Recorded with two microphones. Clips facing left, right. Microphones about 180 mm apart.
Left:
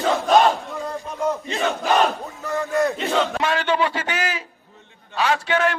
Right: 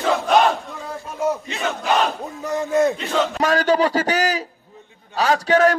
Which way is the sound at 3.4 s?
40° right (ahead or behind).